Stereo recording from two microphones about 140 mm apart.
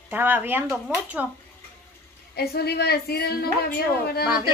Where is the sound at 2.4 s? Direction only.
90° left.